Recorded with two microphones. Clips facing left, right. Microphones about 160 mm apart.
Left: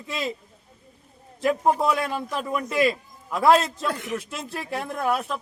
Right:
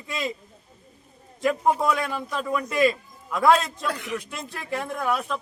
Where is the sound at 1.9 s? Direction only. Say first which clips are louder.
Left 1 dB; 35° left (ahead or behind).